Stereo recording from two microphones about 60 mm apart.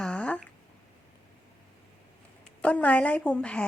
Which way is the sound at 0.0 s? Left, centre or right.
Centre.